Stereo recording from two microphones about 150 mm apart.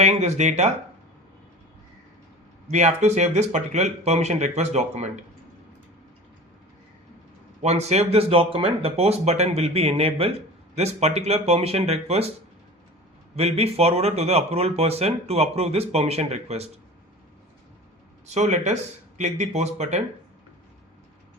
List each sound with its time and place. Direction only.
0.0 s speech: 50° right (ahead or behind)
2.6 s speech: 50° right (ahead or behind)
7.6 s speech: 45° right (ahead or behind)
13.3 s speech: 45° right (ahead or behind)
18.3 s speech: 50° right (ahead or behind)